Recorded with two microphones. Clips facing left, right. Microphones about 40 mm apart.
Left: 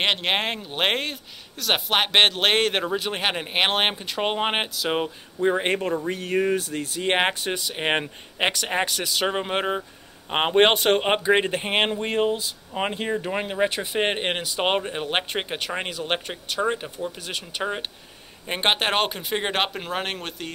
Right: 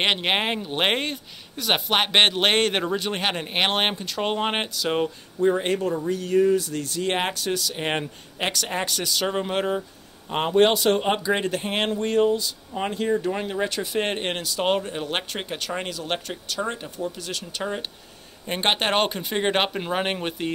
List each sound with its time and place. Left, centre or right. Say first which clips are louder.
0.0 s speech: right 1 dB; centre
5.4 s speech: right 1 dB; left
6.0 s speech: right 6 dB; left
6.7 s speech: left 1 dB; left
8.8 s speech: left 1 dB; centre
10.3 s speech: left 1 dB; left; by 17.8 s centre
18.5 s speech: even; centre